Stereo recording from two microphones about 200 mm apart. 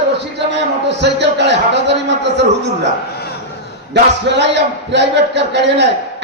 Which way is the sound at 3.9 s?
60° right (ahead or behind).